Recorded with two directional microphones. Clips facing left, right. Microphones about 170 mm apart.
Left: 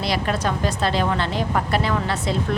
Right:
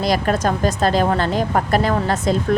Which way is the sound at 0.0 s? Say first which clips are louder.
Right 5 dB; 45° right (ahead or behind).